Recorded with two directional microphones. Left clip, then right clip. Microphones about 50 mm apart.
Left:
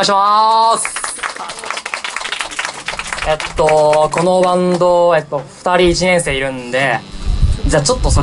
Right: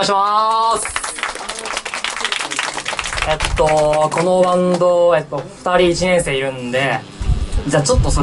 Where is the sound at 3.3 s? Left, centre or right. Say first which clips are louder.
Left 3 dB; centre.